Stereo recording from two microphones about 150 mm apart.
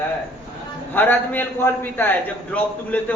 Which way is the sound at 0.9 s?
10° left (ahead or behind).